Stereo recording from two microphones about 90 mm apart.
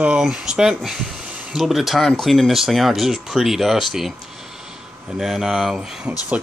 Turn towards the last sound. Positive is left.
turn(degrees=-5)  # may be behind; listen again after turning